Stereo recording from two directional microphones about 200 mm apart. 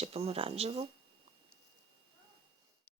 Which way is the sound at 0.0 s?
30° right (ahead or behind).